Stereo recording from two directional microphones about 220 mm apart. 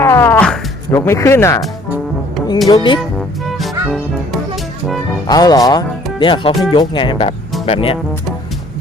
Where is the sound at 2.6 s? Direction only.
20° left (ahead or behind).